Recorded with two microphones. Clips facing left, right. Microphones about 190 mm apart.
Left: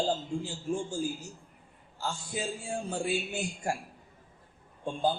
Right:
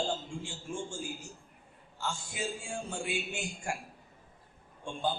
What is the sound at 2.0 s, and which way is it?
Speech, 35° left (ahead or behind).